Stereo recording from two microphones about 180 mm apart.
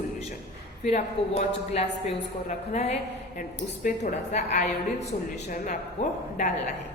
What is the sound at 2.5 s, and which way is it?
A woman's voice, 40° left (ahead or behind).